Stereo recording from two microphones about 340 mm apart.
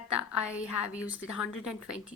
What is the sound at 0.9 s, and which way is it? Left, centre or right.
A woman's voice, centre.